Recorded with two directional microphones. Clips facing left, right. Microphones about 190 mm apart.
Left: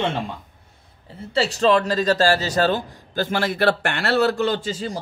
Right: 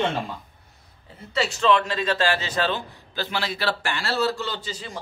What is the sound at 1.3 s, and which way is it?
A man's voice, 35° left (ahead or behind).